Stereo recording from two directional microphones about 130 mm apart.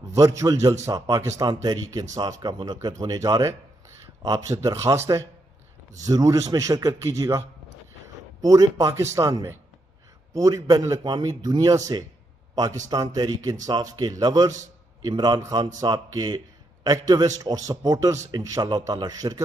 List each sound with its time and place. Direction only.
0.1 s a man's voice: 25° right (ahead or behind)